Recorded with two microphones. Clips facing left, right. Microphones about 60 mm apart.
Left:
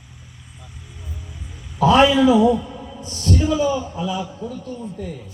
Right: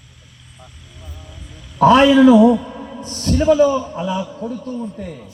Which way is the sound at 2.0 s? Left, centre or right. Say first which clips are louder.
Right 4 dB; right.